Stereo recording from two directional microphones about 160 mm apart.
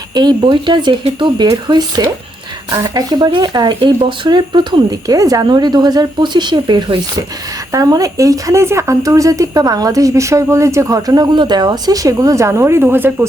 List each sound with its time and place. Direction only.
0.1 s a woman's voice: 25° right (ahead or behind)